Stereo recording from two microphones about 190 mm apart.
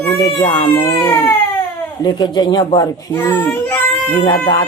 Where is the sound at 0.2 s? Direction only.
15° left (ahead or behind).